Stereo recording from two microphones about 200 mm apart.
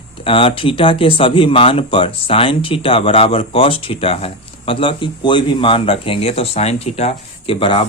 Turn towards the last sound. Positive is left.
turn(degrees=25)  # may be behind; listen again after turning